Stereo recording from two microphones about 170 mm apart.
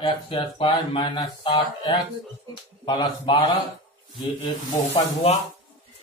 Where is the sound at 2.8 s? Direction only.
30° left (ahead or behind).